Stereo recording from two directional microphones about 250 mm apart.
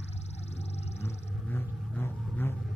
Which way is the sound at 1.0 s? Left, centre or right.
Centre.